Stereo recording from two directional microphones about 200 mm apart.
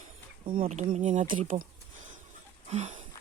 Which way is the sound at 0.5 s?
40° right (ahead or behind).